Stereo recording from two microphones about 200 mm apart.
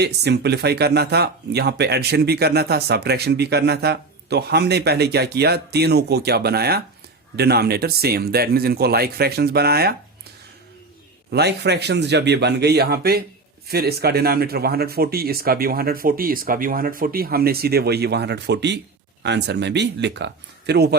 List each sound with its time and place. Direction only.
0.0 s speech: 55° right (ahead or behind)
11.3 s speech: 55° right (ahead or behind)